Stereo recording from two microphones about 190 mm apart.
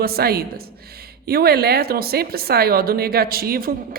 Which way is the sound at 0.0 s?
55° right (ahead or behind).